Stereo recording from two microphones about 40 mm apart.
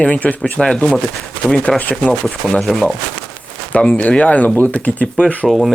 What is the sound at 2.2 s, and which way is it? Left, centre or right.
Speech, centre.